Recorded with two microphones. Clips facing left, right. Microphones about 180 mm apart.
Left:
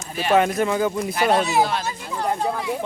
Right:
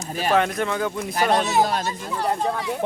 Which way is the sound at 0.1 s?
40° right (ahead or behind).